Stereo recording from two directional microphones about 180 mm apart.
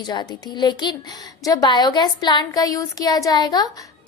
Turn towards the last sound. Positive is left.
turn(degrees=20)  # may be behind; listen again after turning